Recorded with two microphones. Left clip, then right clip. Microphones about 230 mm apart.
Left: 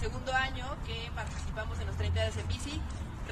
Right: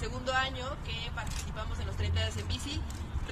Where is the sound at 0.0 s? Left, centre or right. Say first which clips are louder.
Right 1 dB; right.